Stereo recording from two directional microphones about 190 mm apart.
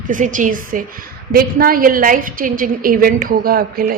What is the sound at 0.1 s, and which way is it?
A woman's voice, 45° right (ahead or behind).